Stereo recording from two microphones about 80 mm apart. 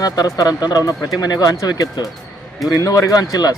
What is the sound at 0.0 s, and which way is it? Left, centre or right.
Speech, left.